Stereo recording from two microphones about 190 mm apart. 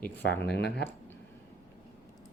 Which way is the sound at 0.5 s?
60° left (ahead or behind).